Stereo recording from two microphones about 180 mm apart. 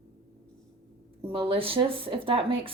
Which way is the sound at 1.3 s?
30° right (ahead or behind).